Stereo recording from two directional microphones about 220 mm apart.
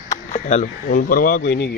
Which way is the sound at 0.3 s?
35° left (ahead or behind).